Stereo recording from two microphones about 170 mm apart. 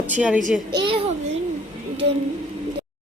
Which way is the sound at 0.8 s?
35° right (ahead or behind).